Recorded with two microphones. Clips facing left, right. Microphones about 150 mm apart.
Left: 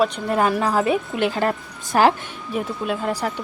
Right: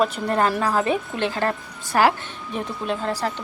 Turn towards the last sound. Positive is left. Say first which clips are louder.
# left 1 dB
turn(degrees=10)  # may be behind; listen again after turning